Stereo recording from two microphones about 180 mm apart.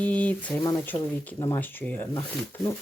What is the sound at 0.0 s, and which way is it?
Speech, 5° left (ahead or behind).